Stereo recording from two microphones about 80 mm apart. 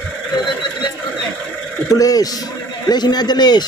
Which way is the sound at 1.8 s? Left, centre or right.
Left.